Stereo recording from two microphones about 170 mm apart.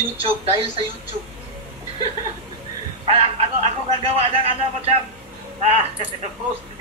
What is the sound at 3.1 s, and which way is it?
Speech, 35° right (ahead or behind).